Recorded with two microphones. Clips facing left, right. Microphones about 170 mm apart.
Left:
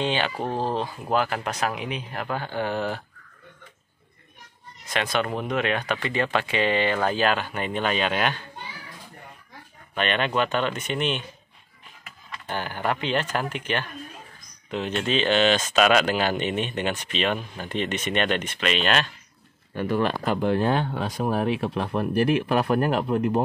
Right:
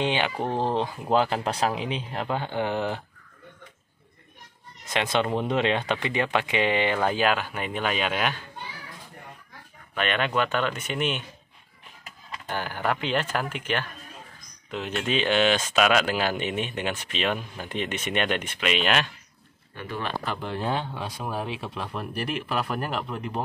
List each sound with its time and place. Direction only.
0.0 s speech: 15° right (ahead or behind)
4.8 s speech: 20° right (ahead or behind); by 8.4 s 5° right (ahead or behind)
9.9 s speech: 5° right (ahead or behind)
12.4 s speech: 5° right (ahead or behind)
19.7 s speech: 45° left (ahead or behind)